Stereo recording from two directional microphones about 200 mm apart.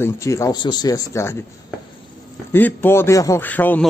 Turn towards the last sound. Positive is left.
turn(degrees=10)  # may be behind; listen again after turning